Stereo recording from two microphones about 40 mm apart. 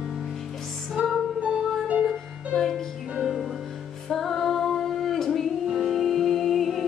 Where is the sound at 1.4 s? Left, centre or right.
Right.